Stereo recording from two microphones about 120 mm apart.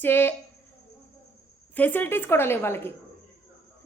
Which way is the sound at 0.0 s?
15° left (ahead or behind).